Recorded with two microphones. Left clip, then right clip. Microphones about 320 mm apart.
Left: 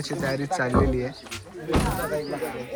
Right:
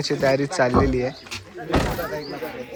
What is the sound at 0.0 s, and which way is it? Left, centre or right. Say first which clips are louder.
Speech: right 8 dB; centre.